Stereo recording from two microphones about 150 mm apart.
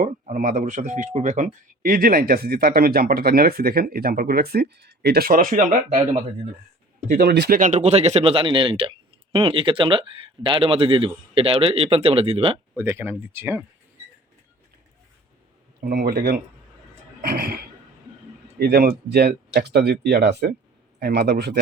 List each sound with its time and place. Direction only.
0.0 s speech: 60° right (ahead or behind)
7.1 s speech: 90° right
7.7 s speech: 45° right (ahead or behind)
12.7 s speech: 15° right (ahead or behind)
15.8 s speech: 90° right
17.2 s a sound: 85° right
18.6 s speech: 90° right